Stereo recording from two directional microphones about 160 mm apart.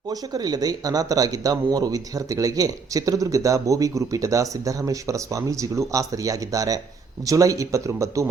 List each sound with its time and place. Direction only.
0.1 s speech: 25° right (ahead or behind)